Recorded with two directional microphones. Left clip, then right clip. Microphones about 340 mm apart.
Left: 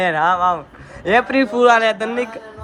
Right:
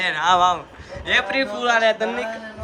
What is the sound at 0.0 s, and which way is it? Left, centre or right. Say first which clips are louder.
A man's voice: left 1 dB; centre.